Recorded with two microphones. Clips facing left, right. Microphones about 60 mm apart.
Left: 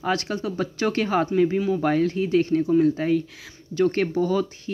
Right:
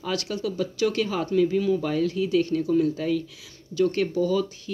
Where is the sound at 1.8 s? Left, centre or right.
Left.